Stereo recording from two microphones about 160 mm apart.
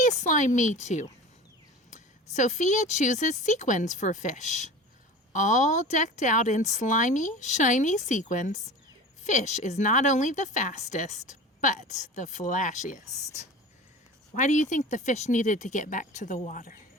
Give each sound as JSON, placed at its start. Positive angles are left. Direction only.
{"t": 0.2, "sound": "speech", "side_deg": 50}